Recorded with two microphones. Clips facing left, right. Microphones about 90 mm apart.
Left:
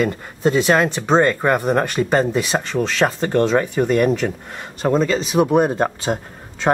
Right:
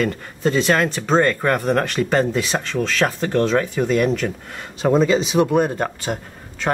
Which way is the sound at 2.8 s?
15° left (ahead or behind).